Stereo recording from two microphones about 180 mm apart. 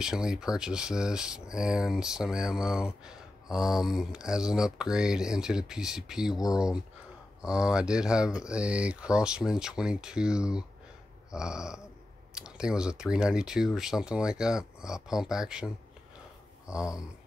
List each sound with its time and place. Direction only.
0.0 s speech: 5° right (ahead or behind)